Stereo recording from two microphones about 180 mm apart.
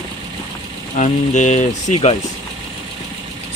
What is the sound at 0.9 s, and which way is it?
Speech, 40° left (ahead or behind).